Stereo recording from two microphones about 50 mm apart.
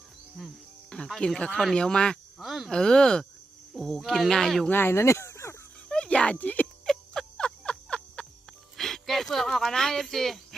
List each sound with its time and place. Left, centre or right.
0.9 s speech: centre
2.4 s speech: centre
2.6 s speech: centre
4.7 s speech: left
5.9 s music: left
7.1 s music: centre
8.8 s speech: centre